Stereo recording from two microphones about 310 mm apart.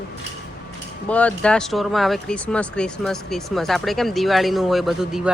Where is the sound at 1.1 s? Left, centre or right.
Centre.